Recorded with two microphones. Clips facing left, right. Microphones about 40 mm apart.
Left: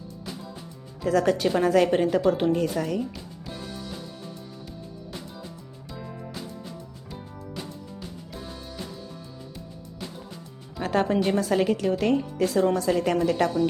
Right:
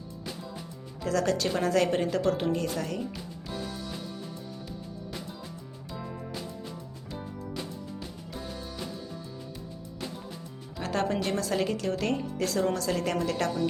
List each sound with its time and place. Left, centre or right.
1.0 s speech: left
2.5 s speech: left
3.5 s music: centre
10.8 s speech: centre